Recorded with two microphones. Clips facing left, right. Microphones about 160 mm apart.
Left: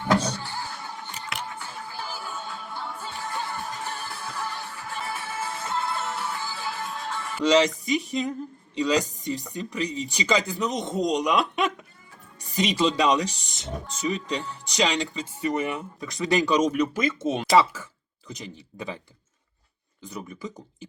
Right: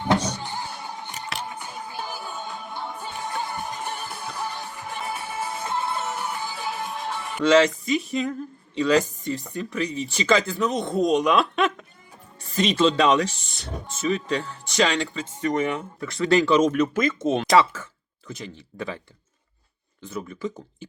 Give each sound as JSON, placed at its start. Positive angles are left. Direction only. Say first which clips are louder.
{"t": 0.0, "sound": "power windows", "louder": "right 1 dB", "side_deg": -20}
{"t": 1.5, "sound": "music", "louder": "right 2 dB", "side_deg": -20}
{"t": 7.4, "sound": "speech", "louder": "right 3 dB", "side_deg": 15}
{"t": 20.0, "sound": "speech", "louder": "right 5 dB", "side_deg": 15}